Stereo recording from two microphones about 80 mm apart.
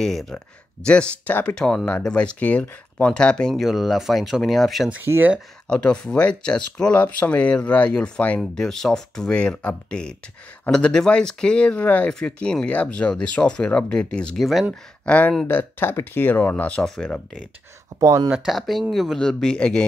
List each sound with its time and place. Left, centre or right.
0.0 s speech: centre
0.8 s speech: centre
5.0 s speech: right
5.7 s speech: centre
8.4 s speech: centre
14.4 s speech: centre
14.7 s speech: centre
15.4 s speech: left
18.0 s speech: right
18.3 s speech: centre